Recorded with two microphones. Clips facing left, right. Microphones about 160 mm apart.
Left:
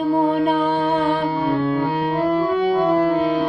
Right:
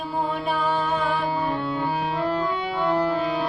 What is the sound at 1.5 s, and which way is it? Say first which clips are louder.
Music: left 6 dB; 50° left (ahead or behind).